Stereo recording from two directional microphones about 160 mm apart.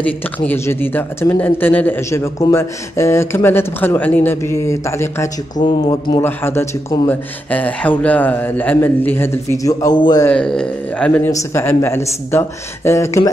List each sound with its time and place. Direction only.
0.0 s speech: 10° left (ahead or behind)
5.6 s speech: 25° left (ahead or behind)
6.2 s speech: 15° left (ahead or behind)
10.2 s speech: 5° left (ahead or behind)